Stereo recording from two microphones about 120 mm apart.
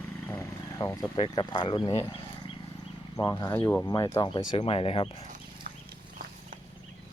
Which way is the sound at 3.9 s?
35° left (ahead or behind).